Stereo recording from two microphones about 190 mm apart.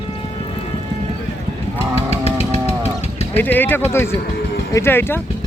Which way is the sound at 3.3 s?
10° left (ahead or behind).